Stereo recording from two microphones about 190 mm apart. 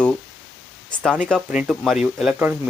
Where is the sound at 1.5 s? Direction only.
5° right (ahead or behind).